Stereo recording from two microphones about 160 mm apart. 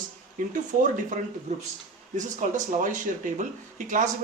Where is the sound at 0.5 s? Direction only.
55° right (ahead or behind).